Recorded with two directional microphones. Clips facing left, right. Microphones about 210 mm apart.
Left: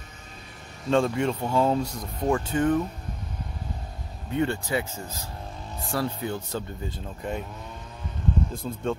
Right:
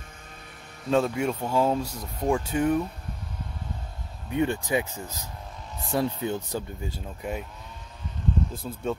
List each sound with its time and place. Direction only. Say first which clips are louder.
0.8 s speech: left 1 dB; 5° right (ahead or behind)
4.4 s speech: right 1 dB; 15° right (ahead or behind)
6.8 s speech: left 1 dB; 10° right (ahead or behind)
8.6 s speech: left 3 dB; 5° right (ahead or behind)